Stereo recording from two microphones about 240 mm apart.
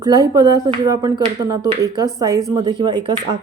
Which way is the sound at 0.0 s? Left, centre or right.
Centre.